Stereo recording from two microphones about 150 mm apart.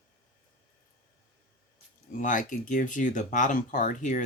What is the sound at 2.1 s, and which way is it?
Speech, 60° left (ahead or behind).